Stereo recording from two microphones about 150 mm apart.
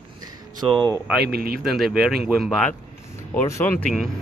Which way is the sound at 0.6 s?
30° right (ahead or behind).